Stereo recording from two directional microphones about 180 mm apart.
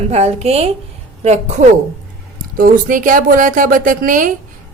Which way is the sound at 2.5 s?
50° right (ahead or behind).